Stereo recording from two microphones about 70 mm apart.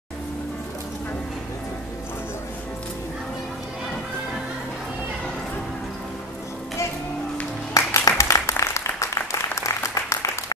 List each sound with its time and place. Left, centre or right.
7.7 s applause: left